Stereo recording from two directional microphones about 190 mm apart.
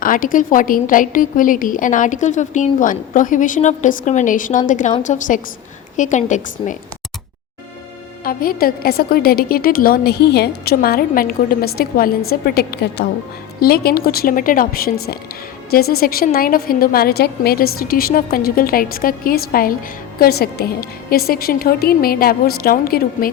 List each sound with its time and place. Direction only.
0.0 s a woman's voice: 45° left (ahead or behind)
8.2 s a woman's voice: 50° left (ahead or behind)